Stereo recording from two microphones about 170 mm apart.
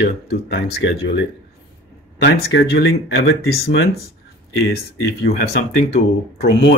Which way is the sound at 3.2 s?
70° left (ahead or behind).